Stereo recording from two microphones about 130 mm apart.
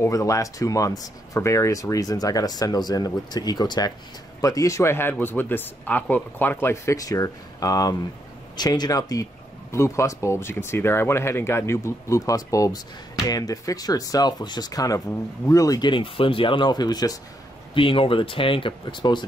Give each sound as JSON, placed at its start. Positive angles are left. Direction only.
{"t": 0.0, "sound": "speech", "side_deg": 25}
{"t": 17.7, "sound": "speech", "side_deg": 40}